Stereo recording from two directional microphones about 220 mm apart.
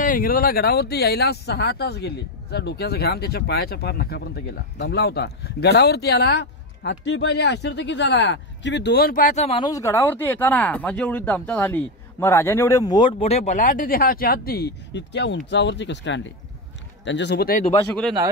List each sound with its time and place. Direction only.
0.0 s speech: 40° left (ahead or behind)
9.7 s speech: 15° left (ahead or behind); by 17.6 s 45° left (ahead or behind)
17.6 s speech: 15° left (ahead or behind)